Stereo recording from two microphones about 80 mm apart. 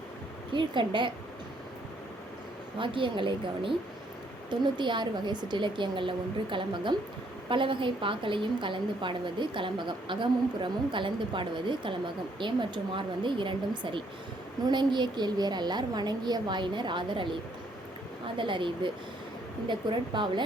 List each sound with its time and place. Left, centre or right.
0.5 s a woman's voice: right
2.7 s a woman's voice: right
4.4 s a woman's voice: right
14.6 s a woman's voice: right
18.3 s a woman's voice: right
19.6 s a woman's voice: right